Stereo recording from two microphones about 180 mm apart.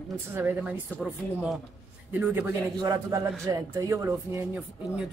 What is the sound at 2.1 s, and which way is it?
Speech, 10° right (ahead or behind).